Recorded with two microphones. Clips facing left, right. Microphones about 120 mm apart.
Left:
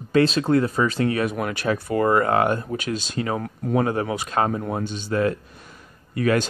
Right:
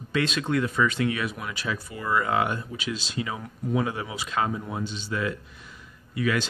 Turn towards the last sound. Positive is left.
turn(degrees=45)  # may be behind; listen again after turning